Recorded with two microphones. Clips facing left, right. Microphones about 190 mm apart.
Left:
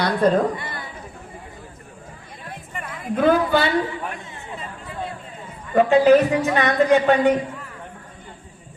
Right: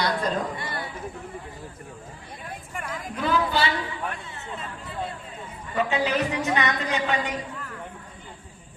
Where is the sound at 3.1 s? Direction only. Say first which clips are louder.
Left 8 dB; 55° left (ahead or behind).